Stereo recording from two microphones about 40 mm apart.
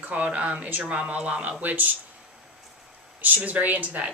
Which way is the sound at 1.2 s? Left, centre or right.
Right.